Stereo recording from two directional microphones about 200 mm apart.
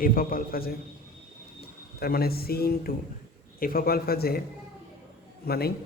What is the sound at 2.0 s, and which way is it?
Speech, 50° left (ahead or behind).